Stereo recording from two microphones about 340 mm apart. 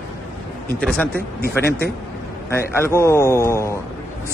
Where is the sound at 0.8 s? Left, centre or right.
Centre.